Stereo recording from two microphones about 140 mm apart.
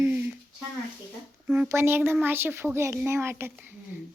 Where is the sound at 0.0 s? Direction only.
10° right (ahead or behind).